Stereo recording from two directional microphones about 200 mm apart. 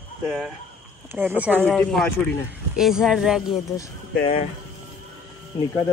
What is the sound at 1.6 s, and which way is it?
Speech, 5° left (ahead or behind).